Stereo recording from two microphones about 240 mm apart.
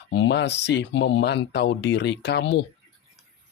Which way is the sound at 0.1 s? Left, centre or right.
Left.